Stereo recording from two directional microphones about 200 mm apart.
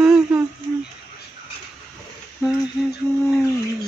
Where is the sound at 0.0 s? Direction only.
5° right (ahead or behind).